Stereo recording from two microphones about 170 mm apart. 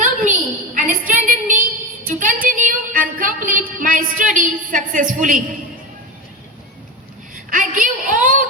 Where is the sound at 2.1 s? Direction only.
50° right (ahead or behind).